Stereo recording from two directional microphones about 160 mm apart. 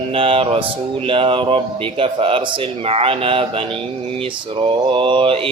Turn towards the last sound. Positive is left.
turn(degrees=-35)  # may be behind; listen again after turning